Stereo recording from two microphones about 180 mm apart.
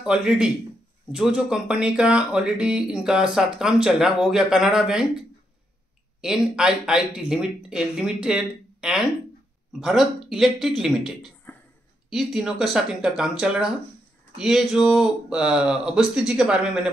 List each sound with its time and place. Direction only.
0.0 s speech: 5° right (ahead or behind)
6.2 s speech: 5° right (ahead or behind)